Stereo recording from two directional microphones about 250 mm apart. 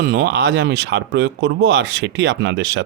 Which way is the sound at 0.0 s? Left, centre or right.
Right.